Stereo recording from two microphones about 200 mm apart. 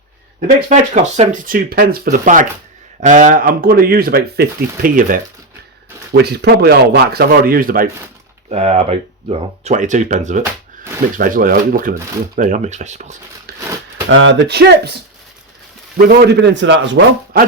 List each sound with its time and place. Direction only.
0.3 s speech: 35° right (ahead or behind)
6.1 s speech: 55° right (ahead or behind)
8.4 s speech: 30° right (ahead or behind)
13.5 s a sound: 50° right (ahead or behind)
14.1 s a man's voice: 65° right (ahead or behind)
16.0 s a man's voice: 55° right (ahead or behind)